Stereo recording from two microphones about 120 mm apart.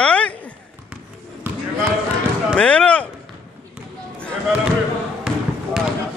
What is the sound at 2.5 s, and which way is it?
Slam, 10° left (ahead or behind).